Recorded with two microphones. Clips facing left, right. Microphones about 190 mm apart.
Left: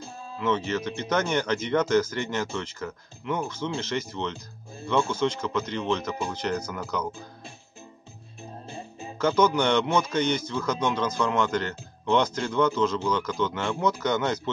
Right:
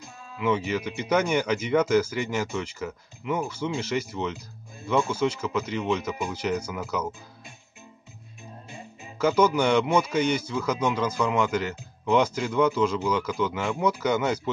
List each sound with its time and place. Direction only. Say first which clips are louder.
0.4 s a man's voice: right 1 dB; 10° right (ahead or behind)
8.6 s music: left 6 dB; 30° left (ahead or behind)
9.2 s a man's voice: right 1 dB; 10° right (ahead or behind)